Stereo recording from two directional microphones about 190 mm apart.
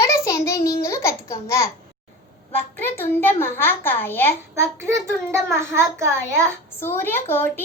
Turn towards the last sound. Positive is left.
turn(degrees=10)  # may be behind; listen again after turning